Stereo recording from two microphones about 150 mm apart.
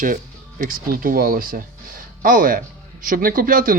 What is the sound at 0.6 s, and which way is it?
A man's voice, 70° right (ahead or behind).